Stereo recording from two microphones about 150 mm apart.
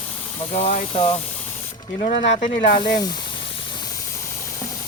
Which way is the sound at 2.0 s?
75° left (ahead or behind).